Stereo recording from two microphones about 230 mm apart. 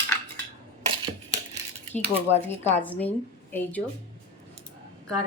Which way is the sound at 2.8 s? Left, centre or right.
Centre.